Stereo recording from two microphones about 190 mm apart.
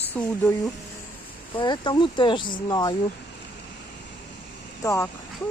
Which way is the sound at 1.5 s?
25° left (ahead or behind).